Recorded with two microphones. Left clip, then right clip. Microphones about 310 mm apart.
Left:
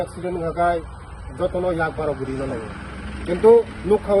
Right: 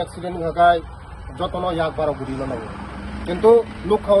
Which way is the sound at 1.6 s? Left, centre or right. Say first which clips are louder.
Right 3 dB; right.